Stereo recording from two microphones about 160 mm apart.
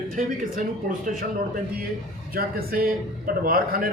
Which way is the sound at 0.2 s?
55° right (ahead or behind).